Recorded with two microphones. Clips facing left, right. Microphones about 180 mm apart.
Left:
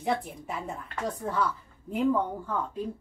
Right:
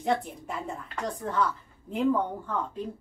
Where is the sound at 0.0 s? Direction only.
Centre (ahead or behind).